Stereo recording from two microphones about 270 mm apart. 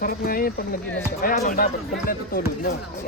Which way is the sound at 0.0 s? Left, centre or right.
Left.